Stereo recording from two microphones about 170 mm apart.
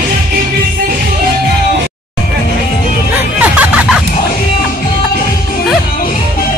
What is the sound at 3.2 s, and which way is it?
Music, 10° right (ahead or behind).